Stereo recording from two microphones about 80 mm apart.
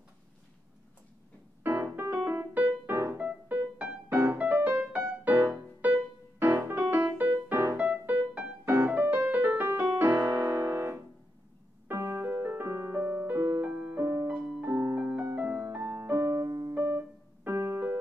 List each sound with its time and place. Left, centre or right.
1.6 s music: right
3.2 s music: centre
4.1 s music: right
5.3 s music: right
10.0 s piano: right
11.9 s music: right
14.6 s piano: right
15.0 s music: centre; by 16.7 s right
16.7 s keyboard: right
17.5 s music: right